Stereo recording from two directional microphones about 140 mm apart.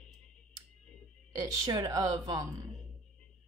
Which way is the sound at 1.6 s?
30° right (ahead or behind).